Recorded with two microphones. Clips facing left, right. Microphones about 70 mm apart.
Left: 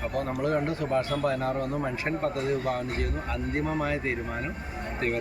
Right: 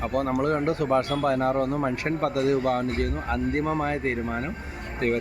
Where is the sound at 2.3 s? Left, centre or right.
Right.